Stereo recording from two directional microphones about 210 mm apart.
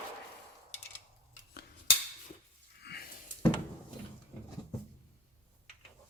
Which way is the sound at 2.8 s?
50° left (ahead or behind).